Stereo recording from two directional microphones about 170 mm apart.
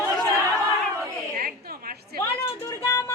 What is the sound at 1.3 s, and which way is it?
Speech, 60° right (ahead or behind).